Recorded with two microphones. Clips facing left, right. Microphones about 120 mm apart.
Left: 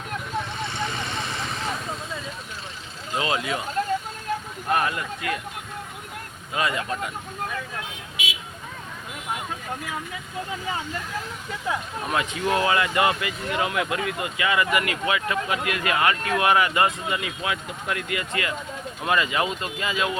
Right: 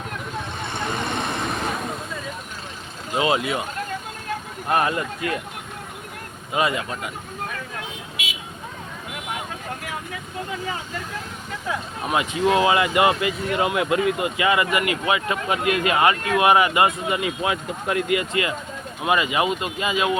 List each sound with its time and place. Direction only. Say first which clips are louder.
0.7 s vehicle: right 3 dB; 55° right (ahead or behind)
3.2 s speech: right 4 dB; 25° right (ahead or behind)
4.7 s speech: right 3 dB; 30° right (ahead or behind)
6.5 s speech: right 3 dB; 20° right (ahead or behind)
12.0 s speech: right 5 dB; 15° right (ahead or behind)